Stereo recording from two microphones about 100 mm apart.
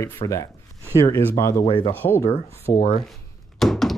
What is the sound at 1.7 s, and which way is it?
Speech, 60° left (ahead or behind).